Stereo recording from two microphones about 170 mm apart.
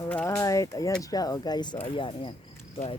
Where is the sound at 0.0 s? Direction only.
15° left (ahead or behind).